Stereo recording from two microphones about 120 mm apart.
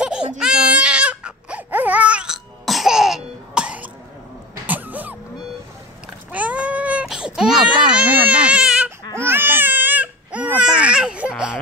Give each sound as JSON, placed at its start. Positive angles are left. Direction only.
{"t": 0.0, "sound": "baby cry", "side_deg": -5}
{"t": 4.6, "sound": "music", "side_deg": -15}
{"t": 6.3, "sound": "baby cry", "side_deg": -10}
{"t": 10.8, "sound": "laughter", "side_deg": -10}